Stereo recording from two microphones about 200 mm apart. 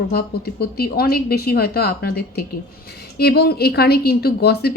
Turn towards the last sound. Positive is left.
turn(degrees=50)  # may be behind; listen again after turning